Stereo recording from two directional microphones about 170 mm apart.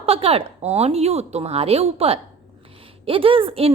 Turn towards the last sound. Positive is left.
turn(degrees=-35)  # may be behind; listen again after turning